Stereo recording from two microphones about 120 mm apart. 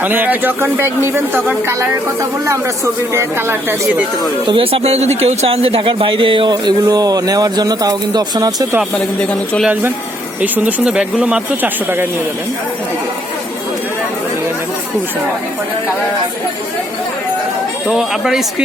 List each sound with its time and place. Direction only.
0.0 s speech: 15° right (ahead or behind)
4.4 s speech: 50° right (ahead or behind); by 8.6 s 30° right (ahead or behind)
10.4 s speech: 15° right (ahead or behind)
17.8 s speech: 5° right (ahead or behind)